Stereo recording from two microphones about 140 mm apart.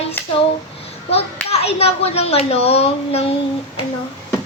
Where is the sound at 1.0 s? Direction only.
45° left (ahead or behind).